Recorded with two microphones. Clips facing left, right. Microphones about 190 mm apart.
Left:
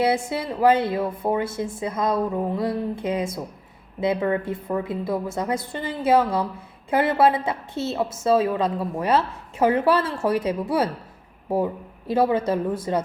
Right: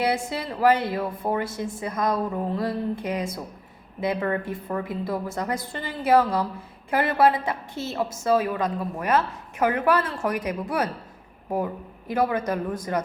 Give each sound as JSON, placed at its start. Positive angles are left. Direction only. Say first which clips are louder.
{"t": 0.0, "sound": "a woman's voice", "louder": "left 3 dB", "side_deg": 20}